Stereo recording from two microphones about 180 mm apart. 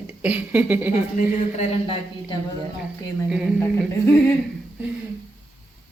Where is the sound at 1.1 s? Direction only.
30° left (ahead or behind).